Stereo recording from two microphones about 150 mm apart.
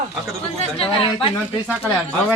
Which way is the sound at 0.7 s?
40° left (ahead or behind).